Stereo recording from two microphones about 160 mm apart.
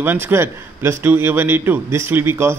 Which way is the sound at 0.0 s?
15° right (ahead or behind).